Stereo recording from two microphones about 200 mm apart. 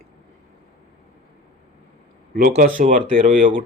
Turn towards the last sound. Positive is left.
turn(degrees=-45)  # may be behind; listen again after turning